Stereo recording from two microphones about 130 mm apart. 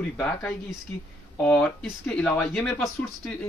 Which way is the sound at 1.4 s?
10° left (ahead or behind).